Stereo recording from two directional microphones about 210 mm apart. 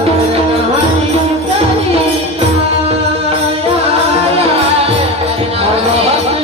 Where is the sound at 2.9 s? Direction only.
30° right (ahead or behind).